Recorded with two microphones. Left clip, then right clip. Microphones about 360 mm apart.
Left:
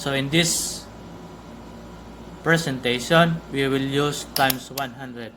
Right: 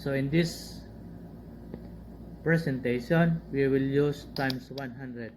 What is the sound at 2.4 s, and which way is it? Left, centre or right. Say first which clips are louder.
Speech: left 7 dB; left.